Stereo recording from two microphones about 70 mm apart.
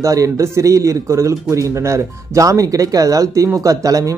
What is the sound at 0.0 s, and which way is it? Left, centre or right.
Speech, right.